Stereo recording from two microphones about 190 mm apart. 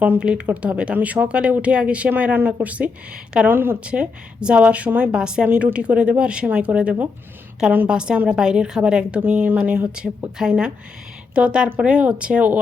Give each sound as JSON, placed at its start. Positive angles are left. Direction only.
{"t": 0.0, "sound": "a woman's voice", "side_deg": -5}